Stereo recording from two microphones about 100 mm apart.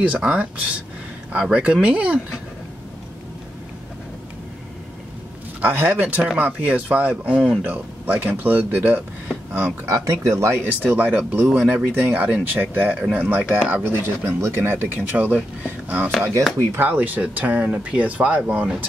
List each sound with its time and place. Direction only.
0.0 s speech: 15° right (ahead or behind)
5.6 s speech: 20° right (ahead or behind)
9.5 s speech: 5° right (ahead or behind)
9.8 s speech: 35° right (ahead or behind)
10.6 s speech: 15° right (ahead or behind)